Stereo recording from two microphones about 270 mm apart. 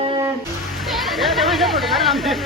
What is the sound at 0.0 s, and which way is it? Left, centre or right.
Music, centre.